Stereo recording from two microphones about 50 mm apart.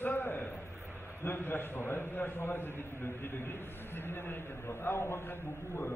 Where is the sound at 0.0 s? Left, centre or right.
Left.